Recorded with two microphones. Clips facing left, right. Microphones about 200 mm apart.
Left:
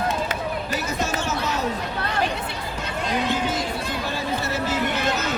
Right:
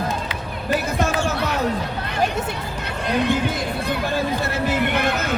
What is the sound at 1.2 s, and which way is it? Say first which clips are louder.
Basketball bounce: right 3 dB; 55° right (ahead or behind).